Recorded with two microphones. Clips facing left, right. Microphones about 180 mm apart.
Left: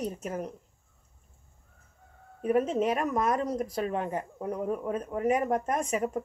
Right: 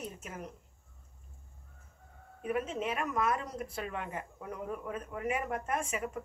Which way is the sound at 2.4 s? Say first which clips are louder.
Left 8 dB; 40° left (ahead or behind).